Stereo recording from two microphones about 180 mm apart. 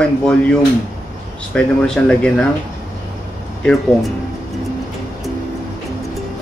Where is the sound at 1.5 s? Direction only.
5° left (ahead or behind).